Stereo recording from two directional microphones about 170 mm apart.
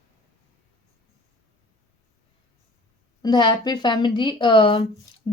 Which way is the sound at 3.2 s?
25° left (ahead or behind).